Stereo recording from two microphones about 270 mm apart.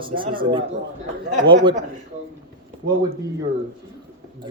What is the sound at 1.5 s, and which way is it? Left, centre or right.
Speech, centre.